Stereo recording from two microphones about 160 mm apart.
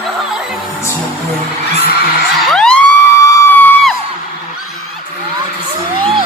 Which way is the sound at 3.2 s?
15° left (ahead or behind).